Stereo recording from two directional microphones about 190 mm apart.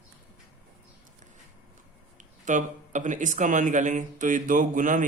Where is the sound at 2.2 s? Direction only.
40° right (ahead or behind).